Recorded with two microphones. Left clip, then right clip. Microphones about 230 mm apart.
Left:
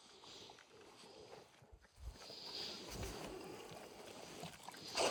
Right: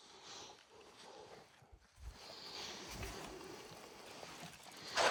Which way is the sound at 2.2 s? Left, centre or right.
Centre.